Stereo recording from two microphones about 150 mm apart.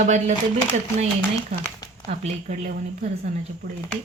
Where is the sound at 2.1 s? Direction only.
45° right (ahead or behind).